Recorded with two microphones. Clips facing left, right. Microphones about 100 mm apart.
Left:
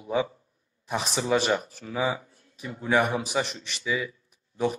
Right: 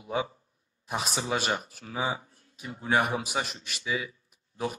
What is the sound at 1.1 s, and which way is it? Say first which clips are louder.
Speech: left 7 dB; centre (ahead or behind).